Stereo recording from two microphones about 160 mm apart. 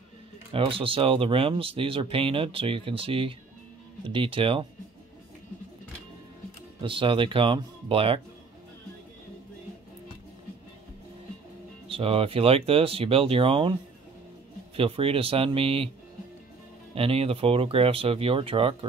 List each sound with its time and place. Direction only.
0.5 s speech: 35° right (ahead or behind)
6.8 s speech: 35° right (ahead or behind)
11.9 s speech: 35° right (ahead or behind)
14.8 s speech: 35° right (ahead or behind)
16.9 s speech: 35° right (ahead or behind)